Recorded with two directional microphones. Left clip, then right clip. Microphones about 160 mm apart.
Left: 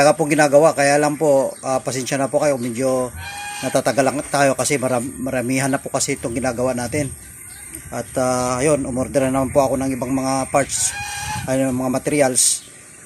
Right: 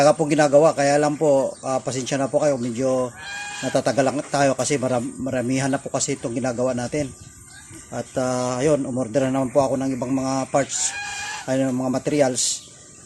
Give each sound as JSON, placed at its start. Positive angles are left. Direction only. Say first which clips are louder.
{"t": 0.0, "sound": "speech", "louder": "left 2 dB", "side_deg": 0}